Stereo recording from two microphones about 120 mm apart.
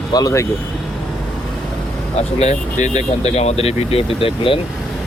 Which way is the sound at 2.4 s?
70° left (ahead or behind).